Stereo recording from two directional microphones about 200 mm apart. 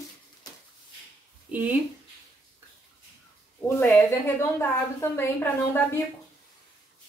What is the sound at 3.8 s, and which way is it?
A woman's voice, 10° left (ahead or behind).